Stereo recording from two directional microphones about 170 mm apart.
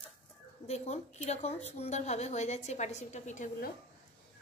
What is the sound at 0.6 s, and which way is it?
A woman's voice, 40° left (ahead or behind).